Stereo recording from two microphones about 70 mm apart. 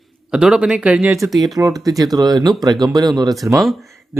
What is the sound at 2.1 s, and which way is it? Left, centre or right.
Speech, right.